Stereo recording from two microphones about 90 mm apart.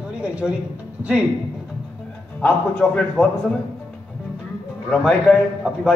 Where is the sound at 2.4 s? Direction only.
10° left (ahead or behind).